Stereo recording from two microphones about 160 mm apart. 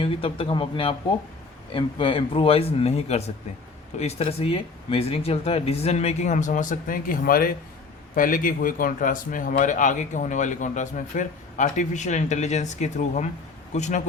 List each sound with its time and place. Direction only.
0.0 s a man's voice: 35° left (ahead or behind)